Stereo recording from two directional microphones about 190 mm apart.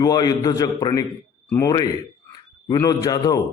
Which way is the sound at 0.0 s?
20° left (ahead or behind).